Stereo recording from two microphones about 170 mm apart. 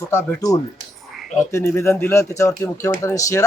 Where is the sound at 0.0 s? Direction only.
15° left (ahead or behind).